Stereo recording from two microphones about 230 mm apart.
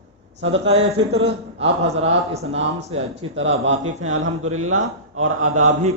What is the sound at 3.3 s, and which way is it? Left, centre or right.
Speech, right.